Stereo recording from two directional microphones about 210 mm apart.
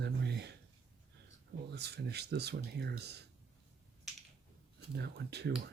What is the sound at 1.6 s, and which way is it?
Speech, 50° right (ahead or behind).